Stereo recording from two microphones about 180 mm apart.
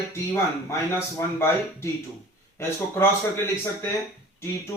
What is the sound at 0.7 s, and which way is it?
Speech, 15° left (ahead or behind).